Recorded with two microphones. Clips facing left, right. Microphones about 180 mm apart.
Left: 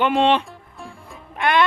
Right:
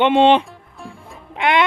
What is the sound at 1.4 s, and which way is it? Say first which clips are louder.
Music: right 2 dB; 20° right (ahead or behind).